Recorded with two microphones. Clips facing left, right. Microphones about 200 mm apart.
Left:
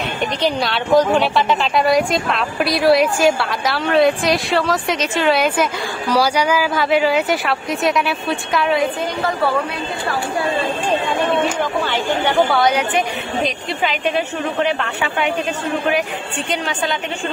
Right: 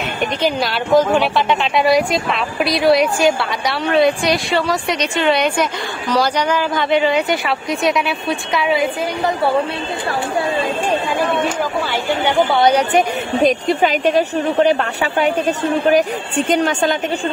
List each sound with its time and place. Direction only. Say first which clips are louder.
0.4 s a woman's voice: even; centre (ahead or behind)
9.2 s a woman's voice: right 2 dB; 25° right (ahead or behind)
11.1 s speech: even; 10° right (ahead or behind)
12.4 s a woman's voice: right 3 dB; 30° right (ahead or behind); by 17.0 s 45° right (ahead or behind)